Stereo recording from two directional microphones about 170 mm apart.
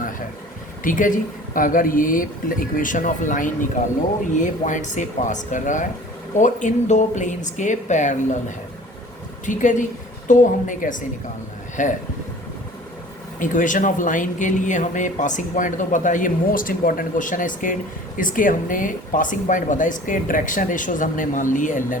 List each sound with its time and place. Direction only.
0.9 s speech: 50° left (ahead or behind)
13.4 s speech: 50° left (ahead or behind)